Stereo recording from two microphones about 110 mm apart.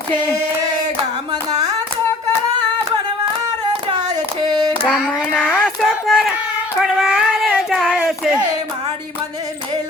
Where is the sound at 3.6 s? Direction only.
40° right (ahead or behind).